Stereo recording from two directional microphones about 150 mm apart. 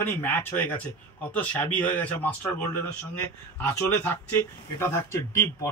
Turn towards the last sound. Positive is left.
turn(degrees=15)  # may be behind; listen again after turning